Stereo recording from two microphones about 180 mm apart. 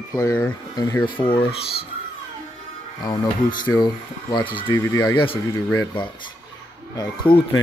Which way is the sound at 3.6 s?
25° left (ahead or behind).